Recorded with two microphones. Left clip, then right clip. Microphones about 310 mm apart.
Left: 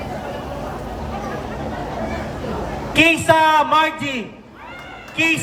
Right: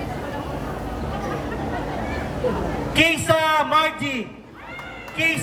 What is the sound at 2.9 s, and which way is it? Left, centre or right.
A man's voice, centre.